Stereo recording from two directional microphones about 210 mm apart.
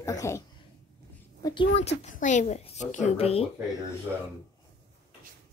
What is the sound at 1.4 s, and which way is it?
A woman's voice, 25° left (ahead or behind).